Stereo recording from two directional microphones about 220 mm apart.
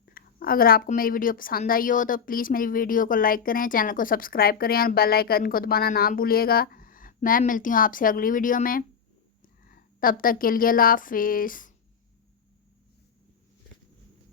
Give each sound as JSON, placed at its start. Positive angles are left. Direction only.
{"t": 0.0, "sound": "a woman's voice", "side_deg": 40}